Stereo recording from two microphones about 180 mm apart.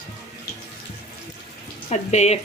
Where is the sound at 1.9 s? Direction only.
40° left (ahead or behind).